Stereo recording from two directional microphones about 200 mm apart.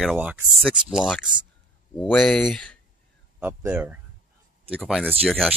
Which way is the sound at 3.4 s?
10° right (ahead or behind).